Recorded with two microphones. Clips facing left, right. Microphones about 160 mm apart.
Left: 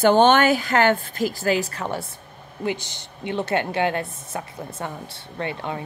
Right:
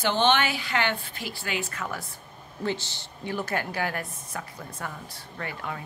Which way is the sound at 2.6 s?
15° left (ahead or behind).